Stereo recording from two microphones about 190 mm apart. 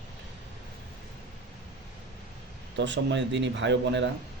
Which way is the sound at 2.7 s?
70° right (ahead or behind).